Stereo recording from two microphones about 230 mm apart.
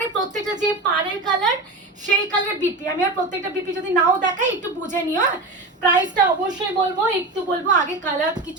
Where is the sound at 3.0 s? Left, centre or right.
Right.